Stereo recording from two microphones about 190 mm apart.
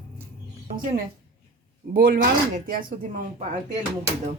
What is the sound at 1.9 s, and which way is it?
Speech, 50° right (ahead or behind).